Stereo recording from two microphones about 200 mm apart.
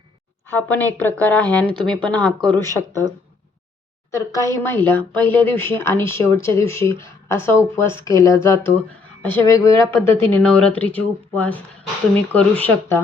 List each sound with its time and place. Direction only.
0.4 s speech: 10° left (ahead or behind)
4.1 s speech: 15° left (ahead or behind)